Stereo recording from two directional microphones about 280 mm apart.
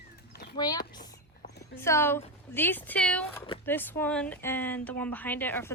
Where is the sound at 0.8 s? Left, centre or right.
Left.